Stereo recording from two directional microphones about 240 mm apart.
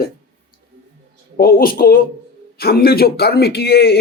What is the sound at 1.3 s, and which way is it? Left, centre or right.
Speech, left.